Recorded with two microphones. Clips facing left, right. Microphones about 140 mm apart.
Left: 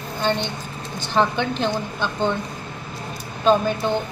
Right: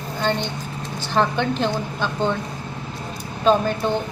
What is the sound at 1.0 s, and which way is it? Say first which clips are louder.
A woman's voice: even; centre (ahead or behind).